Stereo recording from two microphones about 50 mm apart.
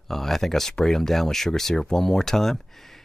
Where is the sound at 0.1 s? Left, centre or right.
Centre.